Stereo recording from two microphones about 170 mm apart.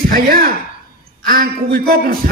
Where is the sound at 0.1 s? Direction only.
55° right (ahead or behind).